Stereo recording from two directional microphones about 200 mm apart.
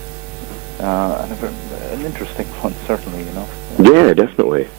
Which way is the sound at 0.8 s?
20° right (ahead or behind).